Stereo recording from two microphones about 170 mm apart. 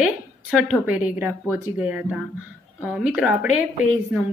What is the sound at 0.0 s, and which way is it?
A woman's voice, 5° right (ahead or behind).